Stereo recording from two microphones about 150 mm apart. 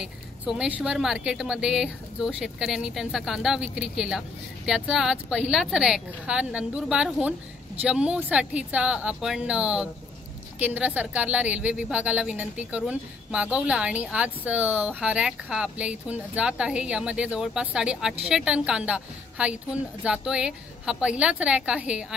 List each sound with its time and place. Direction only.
0.0 s a woman's voice: 5° right (ahead or behind)